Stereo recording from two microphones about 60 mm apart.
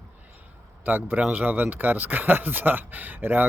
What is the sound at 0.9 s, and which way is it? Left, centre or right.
Speech, right.